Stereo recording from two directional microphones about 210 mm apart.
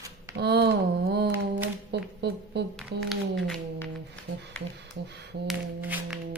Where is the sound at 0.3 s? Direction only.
50° right (ahead or behind).